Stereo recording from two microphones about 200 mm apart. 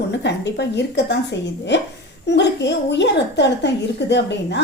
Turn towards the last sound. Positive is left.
turn(degrees=60)  # may be behind; listen again after turning